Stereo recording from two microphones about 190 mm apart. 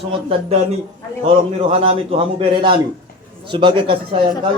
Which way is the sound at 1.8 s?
30° right (ahead or behind).